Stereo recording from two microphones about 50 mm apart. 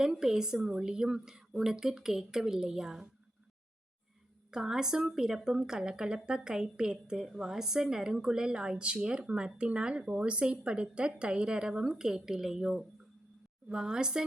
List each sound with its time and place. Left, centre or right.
0.0 s speech: centre
4.5 s speech: centre